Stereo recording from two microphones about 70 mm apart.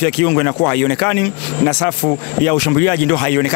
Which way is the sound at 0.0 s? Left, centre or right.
Left.